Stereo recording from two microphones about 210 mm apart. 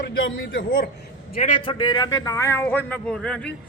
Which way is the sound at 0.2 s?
60° left (ahead or behind).